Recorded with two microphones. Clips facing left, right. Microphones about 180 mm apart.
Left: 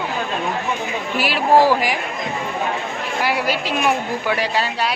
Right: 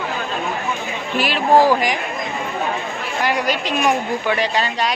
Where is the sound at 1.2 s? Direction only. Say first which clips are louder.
Right 1 dB; 10° left (ahead or behind).